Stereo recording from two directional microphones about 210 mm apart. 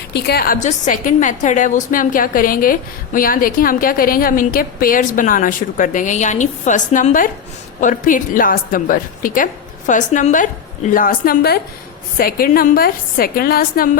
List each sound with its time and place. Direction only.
0.1 s a woman's voice: 50° left (ahead or behind)